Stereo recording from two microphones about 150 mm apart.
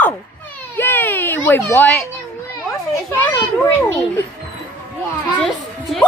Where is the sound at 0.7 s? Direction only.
15° left (ahead or behind).